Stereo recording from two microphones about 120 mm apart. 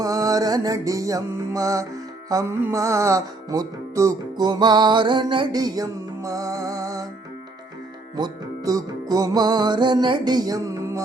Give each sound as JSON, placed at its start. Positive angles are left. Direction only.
{"t": 0.0, "sound": "music", "side_deg": -30}
{"t": 8.1, "sound": "music", "side_deg": -35}